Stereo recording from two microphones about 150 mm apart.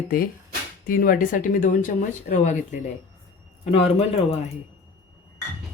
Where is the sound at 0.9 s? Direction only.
70° left (ahead or behind).